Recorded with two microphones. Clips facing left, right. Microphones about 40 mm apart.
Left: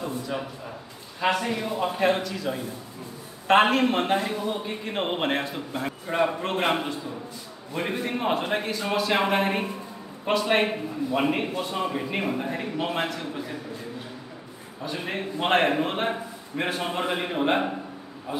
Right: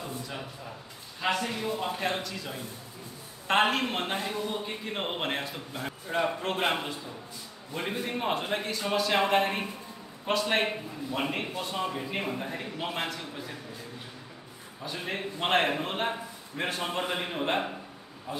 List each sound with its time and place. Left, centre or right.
0.0 s a sound: centre
1.2 s a man's voice: centre
14.9 s a man's voice: centre